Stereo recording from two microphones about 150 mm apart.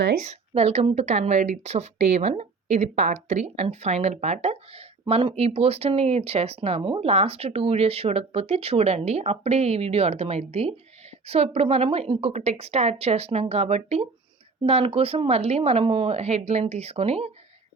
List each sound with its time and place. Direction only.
0.2 s speech: 45° right (ahead or behind)